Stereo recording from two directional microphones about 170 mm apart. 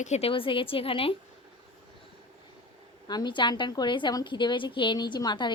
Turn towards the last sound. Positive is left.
turn(degrees=25)  # may be behind; listen again after turning